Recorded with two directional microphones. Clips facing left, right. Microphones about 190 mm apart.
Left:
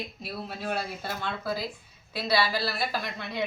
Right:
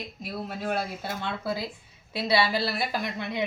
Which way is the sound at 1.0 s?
20° right (ahead or behind).